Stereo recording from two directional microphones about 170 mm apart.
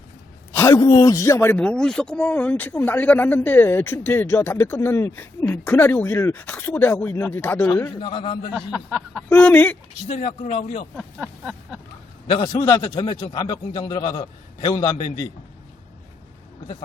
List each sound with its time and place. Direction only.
0.5 s speech: 20° left (ahead or behind); by 8.4 s 35° left (ahead or behind)
8.5 s speech: centre (ahead or behind)
10.1 s a man's voice: 40° left (ahead or behind)
10.9 s a sound: centre (ahead or behind)
12.5 s a man's voice: 15° left (ahead or behind)